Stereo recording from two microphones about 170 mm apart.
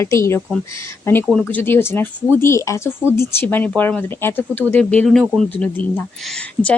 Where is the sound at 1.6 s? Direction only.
15° left (ahead or behind).